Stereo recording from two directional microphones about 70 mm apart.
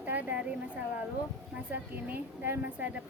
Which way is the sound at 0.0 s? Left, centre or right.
Right.